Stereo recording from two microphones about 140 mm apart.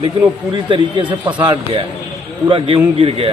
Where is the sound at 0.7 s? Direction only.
35° right (ahead or behind).